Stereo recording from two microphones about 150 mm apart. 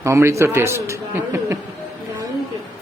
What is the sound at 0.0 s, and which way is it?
A man's voice, 20° right (ahead or behind).